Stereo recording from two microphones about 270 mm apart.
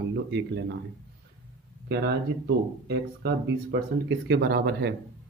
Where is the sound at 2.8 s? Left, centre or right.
Right.